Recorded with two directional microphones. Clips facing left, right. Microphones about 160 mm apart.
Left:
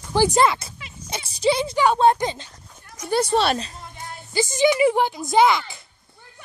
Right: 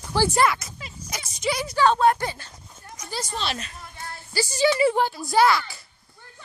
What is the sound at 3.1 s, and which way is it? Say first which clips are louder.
Speech: left 11 dB; 65° left (ahead or behind).